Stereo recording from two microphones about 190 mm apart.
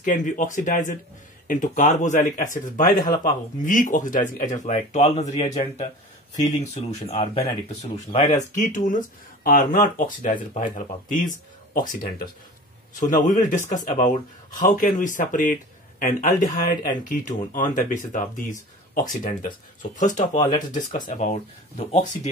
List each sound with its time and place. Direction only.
0.0 s speech: 45° left (ahead or behind)
6.6 s speech: 35° left (ahead or behind)